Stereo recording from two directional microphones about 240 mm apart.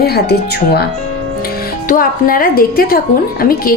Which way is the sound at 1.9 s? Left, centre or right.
Left.